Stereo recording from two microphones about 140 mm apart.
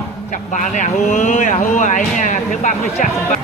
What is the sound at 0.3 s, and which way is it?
Speech, 60° left (ahead or behind).